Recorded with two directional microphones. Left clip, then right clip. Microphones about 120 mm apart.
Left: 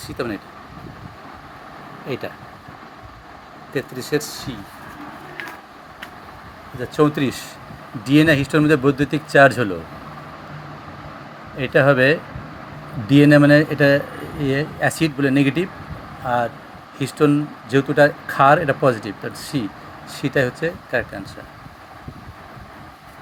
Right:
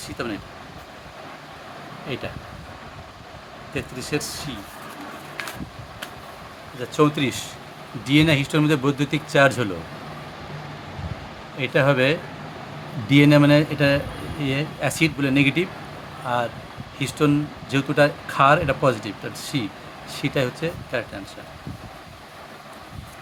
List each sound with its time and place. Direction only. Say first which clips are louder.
0.2 s speech: left 4 dB; 25° left (ahead or behind)
2.0 s speech: left 3 dB; 25° left (ahead or behind)
3.8 s speech: left 5 dB; 30° left (ahead or behind)
6.7 s speech: left 2 dB; 25° left (ahead or behind)
11.5 s speech: left 4 dB; 25° left (ahead or behind)